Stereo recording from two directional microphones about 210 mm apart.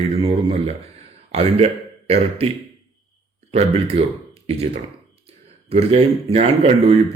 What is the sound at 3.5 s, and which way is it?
Speech, 30° right (ahead or behind).